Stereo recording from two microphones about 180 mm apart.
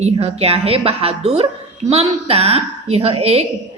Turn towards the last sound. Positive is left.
turn(degrees=-35)  # may be behind; listen again after turning